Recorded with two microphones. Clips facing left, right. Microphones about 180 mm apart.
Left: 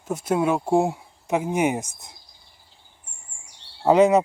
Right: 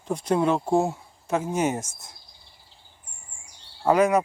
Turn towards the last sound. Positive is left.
turn(degrees=25)  # may be behind; listen again after turning